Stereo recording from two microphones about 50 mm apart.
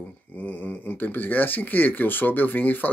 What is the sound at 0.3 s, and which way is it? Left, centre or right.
Speech, left.